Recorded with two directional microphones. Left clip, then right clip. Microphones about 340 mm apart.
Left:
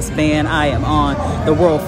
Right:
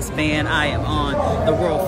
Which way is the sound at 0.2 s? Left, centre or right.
Centre.